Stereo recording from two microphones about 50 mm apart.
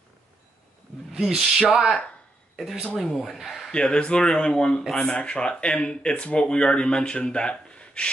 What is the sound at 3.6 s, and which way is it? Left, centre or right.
Speech, centre.